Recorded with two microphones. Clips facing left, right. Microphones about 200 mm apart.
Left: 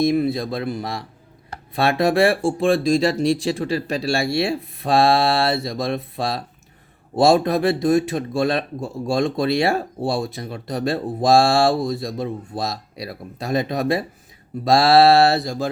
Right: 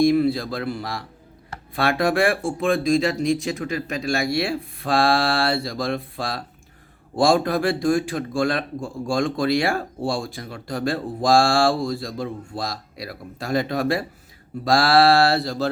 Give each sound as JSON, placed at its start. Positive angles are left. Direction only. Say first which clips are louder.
{"t": 0.0, "sound": "speech", "louder": "right 1 dB", "side_deg": 20}